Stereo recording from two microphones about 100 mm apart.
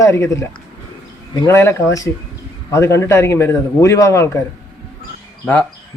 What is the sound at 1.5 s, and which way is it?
A man's voice, 30° left (ahead or behind).